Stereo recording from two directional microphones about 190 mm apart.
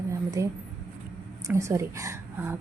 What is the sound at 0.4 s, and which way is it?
A woman's voice, 15° right (ahead or behind).